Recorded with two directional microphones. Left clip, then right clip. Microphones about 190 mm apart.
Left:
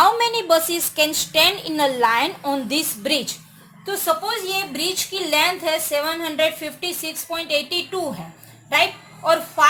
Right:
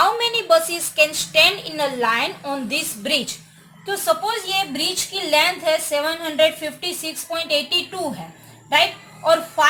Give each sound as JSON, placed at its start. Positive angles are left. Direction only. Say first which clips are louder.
{"t": 0.0, "sound": "a woman's voice", "louder": "left 2 dB", "side_deg": 35}
{"t": 9.2, "sound": "speech", "louder": "right 1 dB", "side_deg": 30}